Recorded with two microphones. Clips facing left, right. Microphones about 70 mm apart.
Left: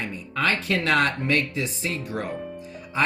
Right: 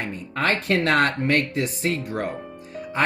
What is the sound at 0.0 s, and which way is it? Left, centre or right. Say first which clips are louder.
Speech: right 1 dB; right.